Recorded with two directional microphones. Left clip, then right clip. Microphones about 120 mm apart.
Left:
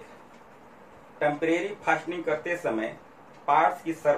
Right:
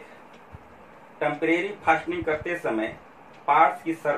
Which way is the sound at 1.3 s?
25° right (ahead or behind).